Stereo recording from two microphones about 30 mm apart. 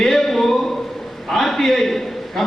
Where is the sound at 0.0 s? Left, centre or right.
Centre.